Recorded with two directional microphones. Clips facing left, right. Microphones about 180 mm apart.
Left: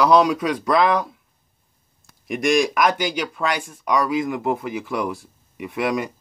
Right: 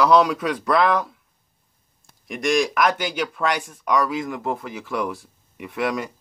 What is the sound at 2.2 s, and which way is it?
Speech, 15° left (ahead or behind).